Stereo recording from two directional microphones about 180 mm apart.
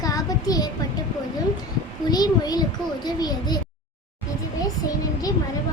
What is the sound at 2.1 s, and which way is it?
A child's voice, 20° left (ahead or behind).